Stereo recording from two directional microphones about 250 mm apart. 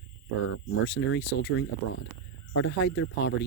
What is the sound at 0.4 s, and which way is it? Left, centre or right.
Speech, left.